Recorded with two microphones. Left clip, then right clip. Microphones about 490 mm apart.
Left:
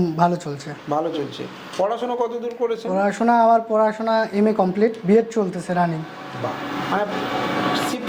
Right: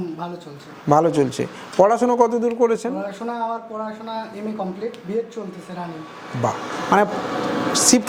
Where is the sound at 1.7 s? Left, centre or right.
Right.